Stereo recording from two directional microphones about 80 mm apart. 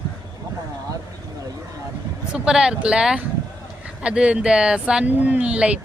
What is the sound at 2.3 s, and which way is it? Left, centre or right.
Speech, centre.